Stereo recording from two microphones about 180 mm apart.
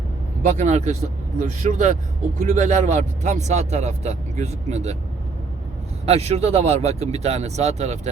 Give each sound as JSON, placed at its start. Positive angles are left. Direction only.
{"t": 0.4, "sound": "a man's voice", "side_deg": -40}
{"t": 6.1, "sound": "a man's voice", "side_deg": -35}